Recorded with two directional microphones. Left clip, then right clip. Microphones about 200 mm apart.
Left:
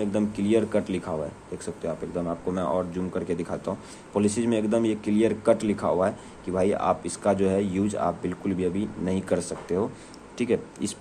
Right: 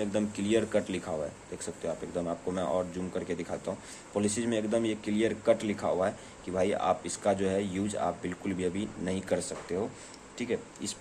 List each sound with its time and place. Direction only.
0.0 s speech: 5° left (ahead or behind)